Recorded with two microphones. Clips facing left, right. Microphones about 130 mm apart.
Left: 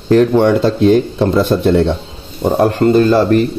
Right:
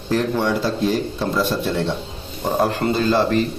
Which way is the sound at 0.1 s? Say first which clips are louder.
Left 10 dB; 60° left (ahead or behind).